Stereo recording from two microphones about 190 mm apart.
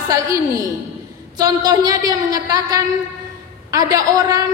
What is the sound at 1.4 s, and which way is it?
A woman's voice, 20° right (ahead or behind).